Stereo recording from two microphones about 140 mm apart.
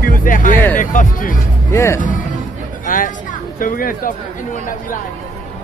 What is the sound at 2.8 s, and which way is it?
Speech, 70° left (ahead or behind).